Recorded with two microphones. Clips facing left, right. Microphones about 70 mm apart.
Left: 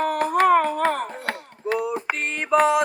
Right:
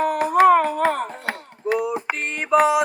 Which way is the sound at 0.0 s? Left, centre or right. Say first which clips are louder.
Right 4 dB; centre.